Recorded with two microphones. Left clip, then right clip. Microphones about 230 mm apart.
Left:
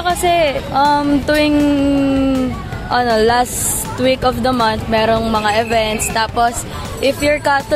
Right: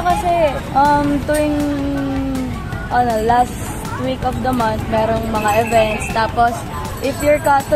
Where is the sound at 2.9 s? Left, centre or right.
Left.